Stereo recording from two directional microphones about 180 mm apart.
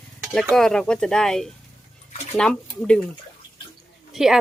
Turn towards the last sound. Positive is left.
turn(degrees=0)  # may be behind; listen again after turning